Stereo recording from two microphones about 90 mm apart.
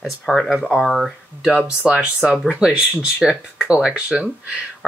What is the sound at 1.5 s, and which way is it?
Speech, 10° right (ahead or behind).